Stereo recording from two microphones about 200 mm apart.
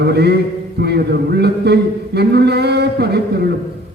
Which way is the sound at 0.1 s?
55° right (ahead or behind).